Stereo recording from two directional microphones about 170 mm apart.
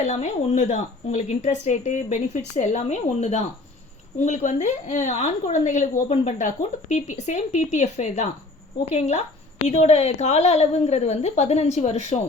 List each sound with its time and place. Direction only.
0.0 s a woman's voice: 45° left (ahead or behind)